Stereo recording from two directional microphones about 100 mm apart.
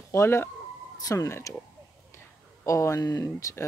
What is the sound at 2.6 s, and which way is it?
Speech, 30° left (ahead or behind).